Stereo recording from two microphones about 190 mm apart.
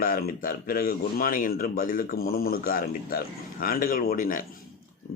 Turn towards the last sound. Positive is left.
turn(degrees=45)  # may be behind; listen again after turning